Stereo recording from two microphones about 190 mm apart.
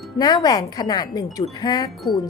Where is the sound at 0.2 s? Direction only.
20° left (ahead or behind).